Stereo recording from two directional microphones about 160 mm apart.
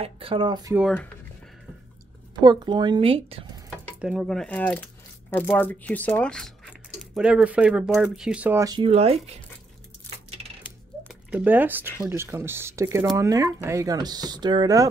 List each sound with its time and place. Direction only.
0.0 s speech: 35° right (ahead or behind)
2.4 s speech: 25° right (ahead or behind)
4.0 s speech: 5° right (ahead or behind)
8.6 s speech: 30° right (ahead or behind)
8.9 s speech: 40° right (ahead or behind)
11.2 s speech: 10° right (ahead or behind)